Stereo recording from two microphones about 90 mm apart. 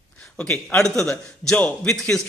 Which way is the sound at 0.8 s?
5° left (ahead or behind).